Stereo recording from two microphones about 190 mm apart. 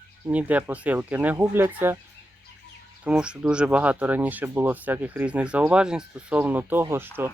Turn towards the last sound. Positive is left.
turn(degrees=-10)  # may be behind; listen again after turning